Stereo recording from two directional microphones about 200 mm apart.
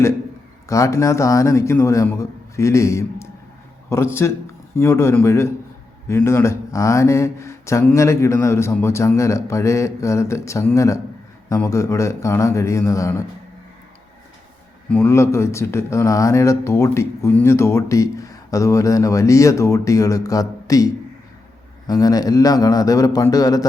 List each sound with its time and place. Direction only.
0.7 s speech: 15° left (ahead or behind)
14.8 s a man's voice: 10° left (ahead or behind)